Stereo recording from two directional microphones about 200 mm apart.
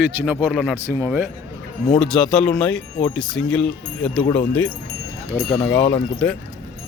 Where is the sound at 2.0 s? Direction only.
5° left (ahead or behind).